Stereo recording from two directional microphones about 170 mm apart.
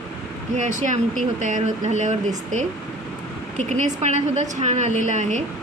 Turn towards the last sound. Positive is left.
turn(degrees=-45)  # may be behind; listen again after turning